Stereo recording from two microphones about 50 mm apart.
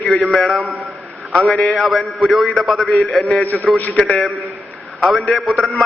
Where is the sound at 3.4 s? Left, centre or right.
Left.